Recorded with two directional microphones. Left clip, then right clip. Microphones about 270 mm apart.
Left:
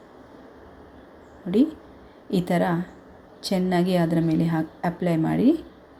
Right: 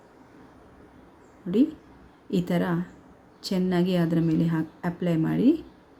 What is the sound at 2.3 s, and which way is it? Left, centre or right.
A woman's voice, centre.